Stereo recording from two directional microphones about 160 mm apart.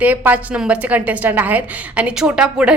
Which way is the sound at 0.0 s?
10° right (ahead or behind).